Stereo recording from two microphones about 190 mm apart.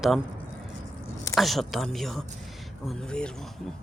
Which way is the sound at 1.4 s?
Centre (ahead or behind).